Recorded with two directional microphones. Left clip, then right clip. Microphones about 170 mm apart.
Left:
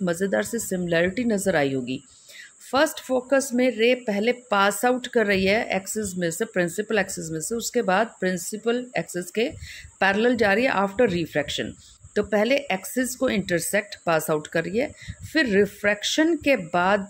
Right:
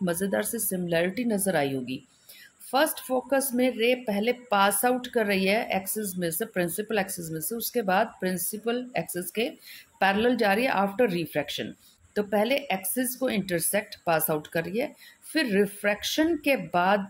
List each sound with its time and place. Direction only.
0.0 s speech: 25° left (ahead or behind)